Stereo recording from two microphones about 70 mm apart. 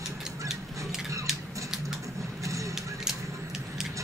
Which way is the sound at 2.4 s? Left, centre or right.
Right.